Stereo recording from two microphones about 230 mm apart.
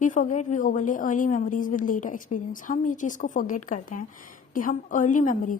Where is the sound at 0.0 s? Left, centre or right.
Left.